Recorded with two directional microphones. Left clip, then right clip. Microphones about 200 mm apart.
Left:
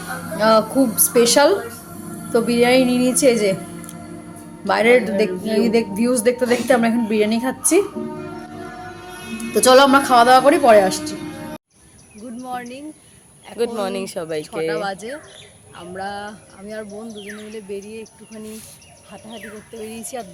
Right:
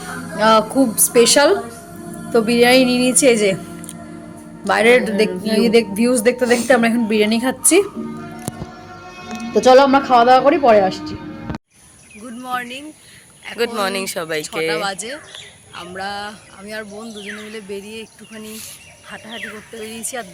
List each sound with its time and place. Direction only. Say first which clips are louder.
0.3 s speech: right 2 dB; centre (ahead or behind)
4.6 s speech: right 2 dB; 5° right (ahead or behind)
9.5 s speech: right 1 dB; 5° right (ahead or behind)
12.4 s speech: right 5 dB; 10° left (ahead or behind)
13.6 s speech: right 2 dB; centre (ahead or behind)
14.8 s music: right 2 dB; 15° left (ahead or behind)
19.8 s speech: right 2 dB; centre (ahead or behind)